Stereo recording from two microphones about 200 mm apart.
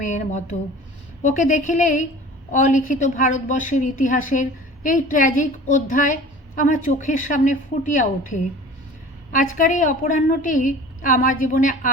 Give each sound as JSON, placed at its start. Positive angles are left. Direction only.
{"t": 0.0, "sound": "a woman's voice", "side_deg": 35}